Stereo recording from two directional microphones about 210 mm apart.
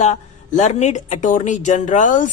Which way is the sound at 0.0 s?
35° left (ahead or behind).